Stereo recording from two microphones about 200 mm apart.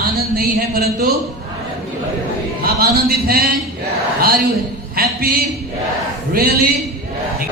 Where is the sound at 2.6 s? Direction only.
50° right (ahead or behind).